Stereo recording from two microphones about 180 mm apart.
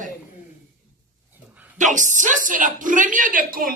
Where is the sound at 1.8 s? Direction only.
45° right (ahead or behind).